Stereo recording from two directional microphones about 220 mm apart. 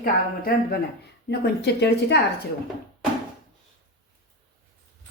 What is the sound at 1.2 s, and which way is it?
Speech, 50° left (ahead or behind).